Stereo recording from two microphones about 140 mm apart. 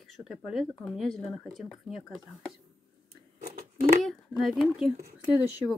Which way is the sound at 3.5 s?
85° right.